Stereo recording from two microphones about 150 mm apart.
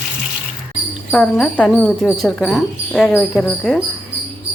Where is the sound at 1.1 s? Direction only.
10° left (ahead or behind).